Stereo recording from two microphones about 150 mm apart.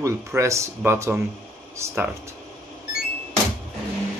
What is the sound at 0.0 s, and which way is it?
Speech, 20° right (ahead or behind).